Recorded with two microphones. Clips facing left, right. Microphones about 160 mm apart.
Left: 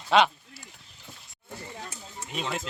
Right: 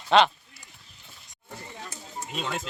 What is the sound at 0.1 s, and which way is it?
Speech, 5° left (ahead or behind).